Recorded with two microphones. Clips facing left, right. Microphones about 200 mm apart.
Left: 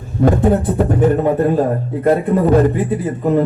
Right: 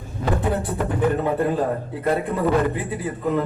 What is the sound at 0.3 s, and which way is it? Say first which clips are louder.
A man's voice: left 9 dB; 45° left (ahead or behind).